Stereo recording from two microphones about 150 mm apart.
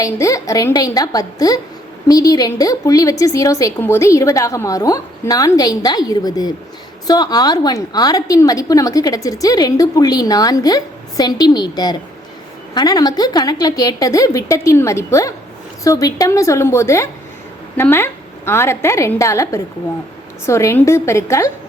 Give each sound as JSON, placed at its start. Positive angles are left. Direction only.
{"t": 0.0, "sound": "a woman's voice", "side_deg": 20}